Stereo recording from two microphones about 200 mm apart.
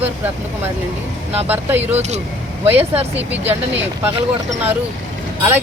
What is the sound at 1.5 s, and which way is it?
Speech, 10° right (ahead or behind).